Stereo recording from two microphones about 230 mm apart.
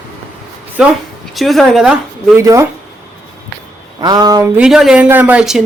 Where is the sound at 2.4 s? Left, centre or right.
Centre.